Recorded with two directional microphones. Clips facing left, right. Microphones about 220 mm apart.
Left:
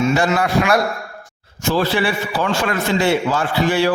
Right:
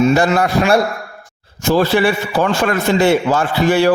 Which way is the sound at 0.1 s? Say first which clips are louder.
Right 4 dB; 40° right (ahead or behind).